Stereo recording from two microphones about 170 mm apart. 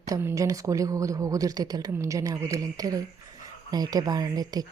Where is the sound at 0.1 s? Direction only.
15° right (ahead or behind).